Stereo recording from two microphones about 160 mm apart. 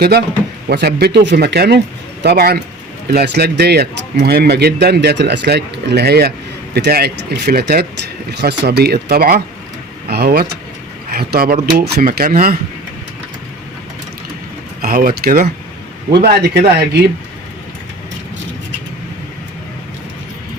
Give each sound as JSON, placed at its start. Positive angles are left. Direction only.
{"t": 0.7, "sound": "speech", "side_deg": -90}
{"t": 2.2, "sound": "speech", "side_deg": -75}
{"t": 8.3, "sound": "speech", "side_deg": -90}
{"t": 14.8, "sound": "speech", "side_deg": -60}
{"t": 16.2, "sound": "speech", "side_deg": -80}